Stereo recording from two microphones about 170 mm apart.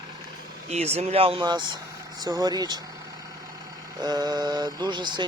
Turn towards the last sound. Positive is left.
turn(degrees=-25)  # may be behind; listen again after turning